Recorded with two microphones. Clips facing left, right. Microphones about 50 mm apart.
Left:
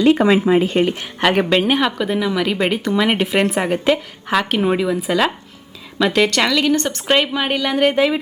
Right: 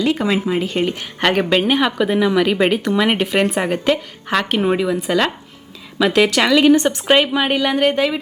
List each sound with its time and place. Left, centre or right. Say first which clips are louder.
0.0 s speech: left 5 dB; left
1.2 s speech: even; centre
6.5 s speech: right 5 dB; centre